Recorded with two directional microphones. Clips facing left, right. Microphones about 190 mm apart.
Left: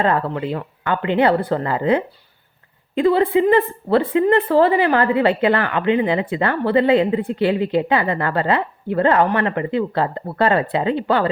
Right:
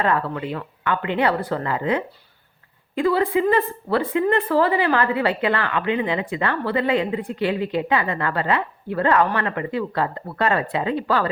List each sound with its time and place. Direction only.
0.0 s a woman's voice: 30° left (ahead or behind)